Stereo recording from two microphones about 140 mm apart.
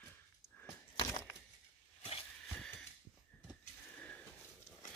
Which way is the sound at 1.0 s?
20° left (ahead or behind).